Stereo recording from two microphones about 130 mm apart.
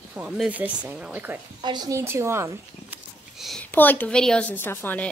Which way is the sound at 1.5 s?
35° right (ahead or behind).